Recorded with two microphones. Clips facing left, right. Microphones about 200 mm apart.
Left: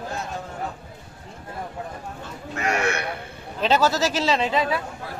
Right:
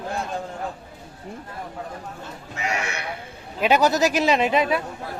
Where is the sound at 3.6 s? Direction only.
15° right (ahead or behind).